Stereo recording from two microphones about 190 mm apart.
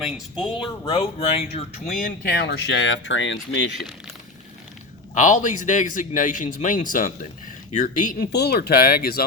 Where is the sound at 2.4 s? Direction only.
60° left (ahead or behind); by 3.7 s 75° left (ahead or behind).